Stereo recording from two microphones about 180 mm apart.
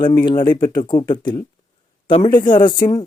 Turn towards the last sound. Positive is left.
turn(degrees=20)  # may be behind; listen again after turning